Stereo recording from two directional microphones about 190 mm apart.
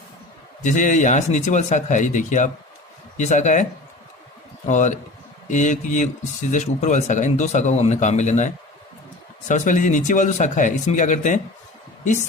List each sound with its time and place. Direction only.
0.6 s speech: 40° left (ahead or behind)